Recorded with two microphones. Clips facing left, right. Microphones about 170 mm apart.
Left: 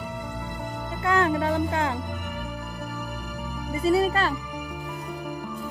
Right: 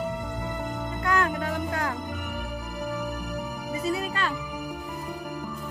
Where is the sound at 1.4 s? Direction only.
25° left (ahead or behind).